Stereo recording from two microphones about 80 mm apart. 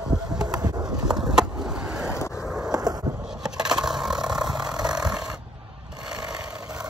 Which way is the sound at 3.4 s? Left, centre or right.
Centre.